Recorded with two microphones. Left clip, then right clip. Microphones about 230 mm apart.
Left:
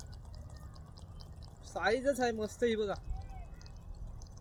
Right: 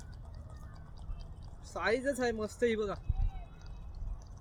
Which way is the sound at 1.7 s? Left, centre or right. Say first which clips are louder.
Left 1 dB; centre.